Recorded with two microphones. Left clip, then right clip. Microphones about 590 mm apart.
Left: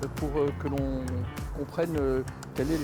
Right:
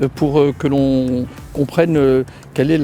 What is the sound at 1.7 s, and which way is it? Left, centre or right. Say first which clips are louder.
Speech: right 14 dB; right.